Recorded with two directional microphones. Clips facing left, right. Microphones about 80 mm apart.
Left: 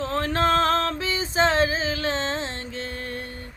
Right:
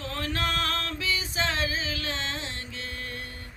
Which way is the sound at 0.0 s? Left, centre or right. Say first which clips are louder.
Left 8 dB; left.